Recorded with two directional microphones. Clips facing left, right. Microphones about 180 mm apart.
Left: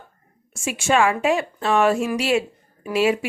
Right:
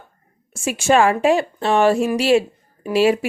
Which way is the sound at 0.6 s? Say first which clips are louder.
Right 4 dB; 40° right (ahead or behind).